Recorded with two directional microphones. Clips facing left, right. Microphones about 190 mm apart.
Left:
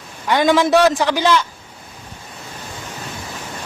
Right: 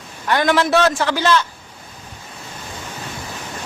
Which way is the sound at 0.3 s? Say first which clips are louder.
Left 2 dB; 15° left (ahead or behind).